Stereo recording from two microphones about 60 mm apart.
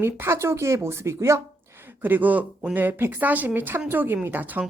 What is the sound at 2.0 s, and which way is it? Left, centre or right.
A woman's voice, right.